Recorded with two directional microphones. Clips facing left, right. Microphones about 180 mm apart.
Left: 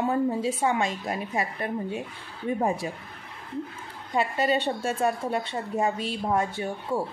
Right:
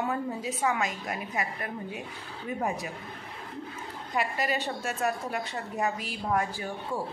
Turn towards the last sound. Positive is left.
turn(degrees=25)  # may be behind; listen again after turning